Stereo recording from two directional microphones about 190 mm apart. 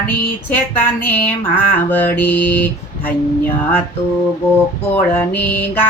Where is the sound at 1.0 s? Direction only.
10° left (ahead or behind).